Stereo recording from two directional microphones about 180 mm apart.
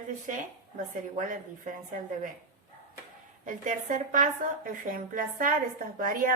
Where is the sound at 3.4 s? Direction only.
45° right (ahead or behind).